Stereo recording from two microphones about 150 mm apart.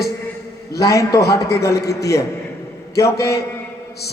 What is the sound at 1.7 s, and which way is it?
Speech, 90° left.